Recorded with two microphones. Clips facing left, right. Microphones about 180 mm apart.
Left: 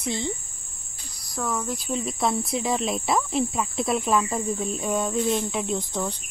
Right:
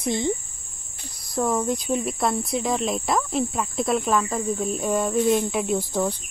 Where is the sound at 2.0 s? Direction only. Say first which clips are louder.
Right 1 dB; centre (ahead or behind).